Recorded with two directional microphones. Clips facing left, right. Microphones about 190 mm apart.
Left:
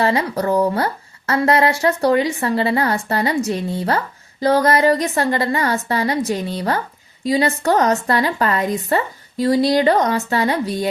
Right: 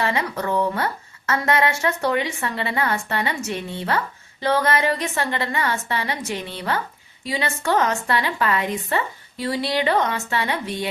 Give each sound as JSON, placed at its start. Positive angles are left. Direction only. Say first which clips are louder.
{"t": 0.0, "sound": "a woman's voice", "louder": "left 5 dB", "side_deg": 35}